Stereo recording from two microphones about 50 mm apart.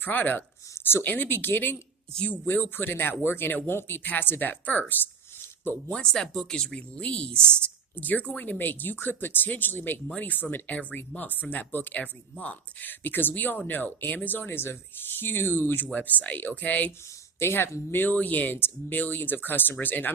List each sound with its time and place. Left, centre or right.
0.0 s speech: left
5.9 s speech: centre
6.6 s speech: centre
7.9 s speech: left
15.9 s speech: left
17.4 s speech: left
18.5 s speech: left
18.9 s speech: left